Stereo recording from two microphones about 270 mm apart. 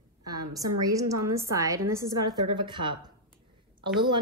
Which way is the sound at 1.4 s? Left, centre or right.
Centre.